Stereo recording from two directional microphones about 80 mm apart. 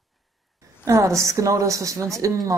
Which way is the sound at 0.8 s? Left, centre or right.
Right.